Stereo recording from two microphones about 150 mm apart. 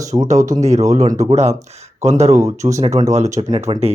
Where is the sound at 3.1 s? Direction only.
50° right (ahead or behind).